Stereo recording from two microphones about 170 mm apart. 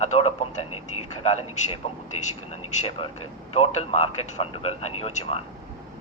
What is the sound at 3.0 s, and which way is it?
Speech, 35° left (ahead or behind).